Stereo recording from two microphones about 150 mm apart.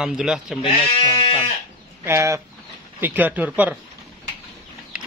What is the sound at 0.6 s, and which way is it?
Speech, 35° left (ahead or behind).